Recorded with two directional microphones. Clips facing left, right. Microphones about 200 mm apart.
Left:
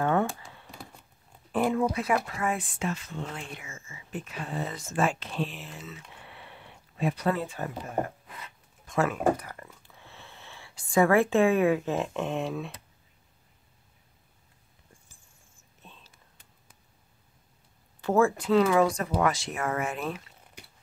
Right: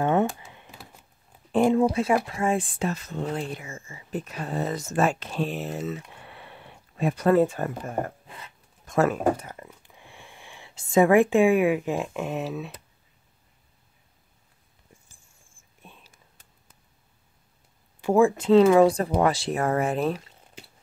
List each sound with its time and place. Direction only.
0.0 s computer keyboard: 20° right (ahead or behind)
1.5 s speech: 25° right (ahead or behind)
9.4 s speech: 20° right (ahead or behind); by 12.7 s 5° right (ahead or behind)
15.8 s whispering: 10° right (ahead or behind)
18.0 s speech: 15° right (ahead or behind)
18.4 s speech: 25° right (ahead or behind)